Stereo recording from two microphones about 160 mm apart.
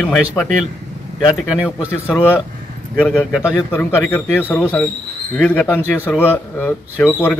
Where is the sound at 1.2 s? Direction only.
5° right (ahead or behind).